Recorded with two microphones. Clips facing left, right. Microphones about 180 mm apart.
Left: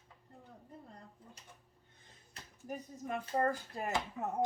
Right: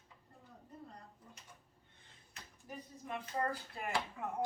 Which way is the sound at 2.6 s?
45° left (ahead or behind).